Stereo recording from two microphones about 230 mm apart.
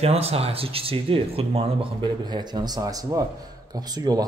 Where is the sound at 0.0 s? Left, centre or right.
Right.